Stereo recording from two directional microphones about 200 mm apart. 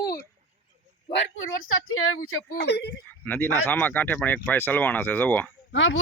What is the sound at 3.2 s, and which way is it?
Speech, 10° left (ahead or behind).